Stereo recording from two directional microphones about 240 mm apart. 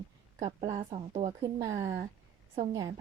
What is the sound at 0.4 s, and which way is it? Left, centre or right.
A woman's voice, right.